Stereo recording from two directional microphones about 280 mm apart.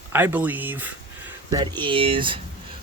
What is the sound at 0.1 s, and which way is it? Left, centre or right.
Speech, centre.